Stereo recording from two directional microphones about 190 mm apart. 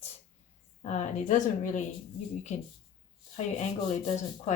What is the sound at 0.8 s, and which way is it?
Speech, 40° left (ahead or behind).